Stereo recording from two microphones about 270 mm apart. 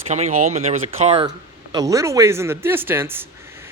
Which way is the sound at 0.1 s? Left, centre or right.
Right.